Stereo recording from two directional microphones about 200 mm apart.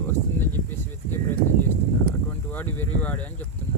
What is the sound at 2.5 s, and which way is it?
Speech, 10° left (ahead or behind).